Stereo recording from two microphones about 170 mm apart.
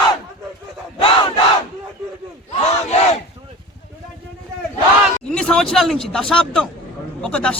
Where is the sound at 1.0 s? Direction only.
35° left (ahead or behind).